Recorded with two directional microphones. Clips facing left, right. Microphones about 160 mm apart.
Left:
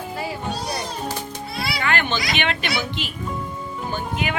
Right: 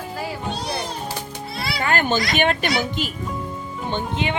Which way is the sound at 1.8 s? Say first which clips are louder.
Right 3 dB; 40° right (ahead or behind).